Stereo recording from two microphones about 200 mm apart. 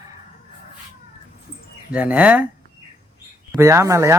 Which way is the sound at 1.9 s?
5° right (ahead or behind).